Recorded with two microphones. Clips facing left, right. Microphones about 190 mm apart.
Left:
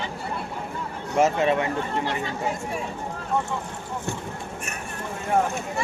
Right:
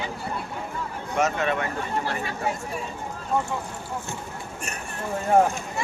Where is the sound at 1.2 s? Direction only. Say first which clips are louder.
Left 4 dB; 30° left (ahead or behind).